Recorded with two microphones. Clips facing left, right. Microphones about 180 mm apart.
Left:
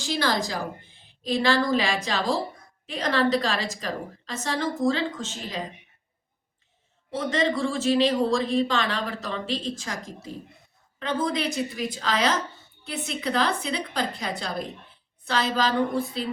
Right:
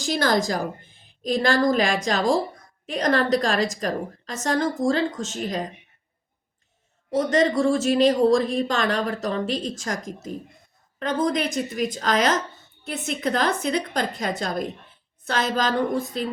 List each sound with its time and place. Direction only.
0.0 s speech: 45° right (ahead or behind)
7.1 s speech: 45° right (ahead or behind)